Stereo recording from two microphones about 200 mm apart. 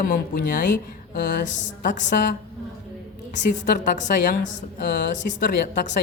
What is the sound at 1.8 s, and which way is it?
Speech, 40° left (ahead or behind).